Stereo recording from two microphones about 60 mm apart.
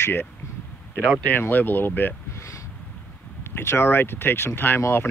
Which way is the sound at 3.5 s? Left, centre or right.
Left.